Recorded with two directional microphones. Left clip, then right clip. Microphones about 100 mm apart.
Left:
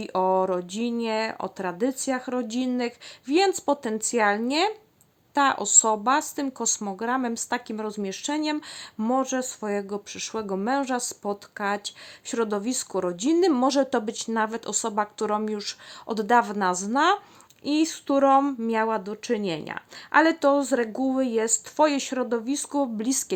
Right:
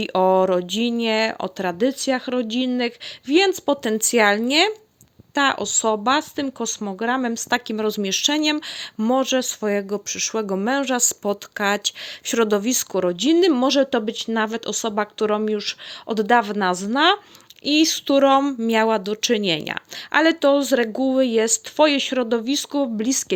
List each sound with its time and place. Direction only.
0.0 s speech: 35° right (ahead or behind)
20.1 s speech: 25° right (ahead or behind)
22.4 s speech: 20° right (ahead or behind)